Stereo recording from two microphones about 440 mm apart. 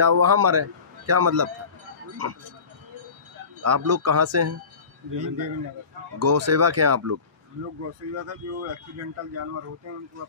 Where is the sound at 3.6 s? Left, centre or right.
Right.